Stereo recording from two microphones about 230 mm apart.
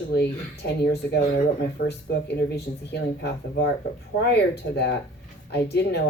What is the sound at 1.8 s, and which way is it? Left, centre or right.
Speech, left.